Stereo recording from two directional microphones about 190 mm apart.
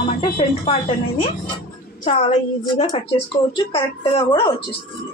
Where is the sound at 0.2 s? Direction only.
30° left (ahead or behind).